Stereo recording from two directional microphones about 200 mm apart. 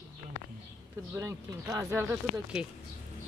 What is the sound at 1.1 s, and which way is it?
Speech, 15° right (ahead or behind).